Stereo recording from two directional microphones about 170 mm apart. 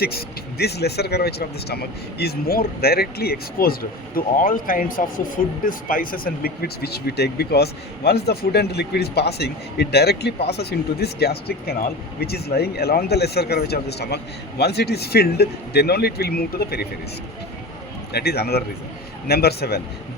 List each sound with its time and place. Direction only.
0.0 s speech: 65° left (ahead or behind)
18.1 s speech: 70° left (ahead or behind)